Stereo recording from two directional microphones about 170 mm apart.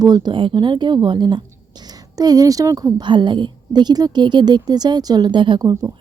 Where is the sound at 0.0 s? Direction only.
25° right (ahead or behind).